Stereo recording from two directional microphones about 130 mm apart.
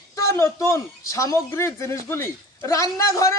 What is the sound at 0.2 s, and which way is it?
A man's voice, 25° left (ahead or behind).